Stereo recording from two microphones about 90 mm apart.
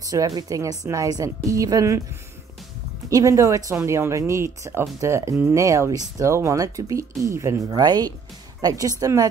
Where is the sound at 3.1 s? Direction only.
40° right (ahead or behind).